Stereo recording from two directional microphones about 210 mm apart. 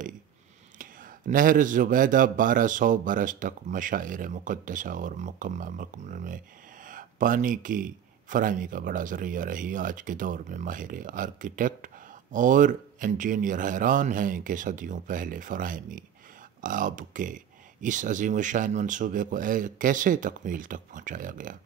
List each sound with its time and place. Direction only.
0.7 s a man's voice: 40° right (ahead or behind)